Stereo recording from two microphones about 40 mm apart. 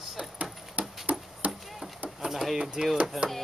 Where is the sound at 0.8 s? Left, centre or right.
Right.